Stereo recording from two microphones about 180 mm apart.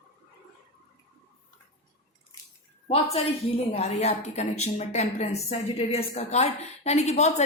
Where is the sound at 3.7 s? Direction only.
35° left (ahead or behind).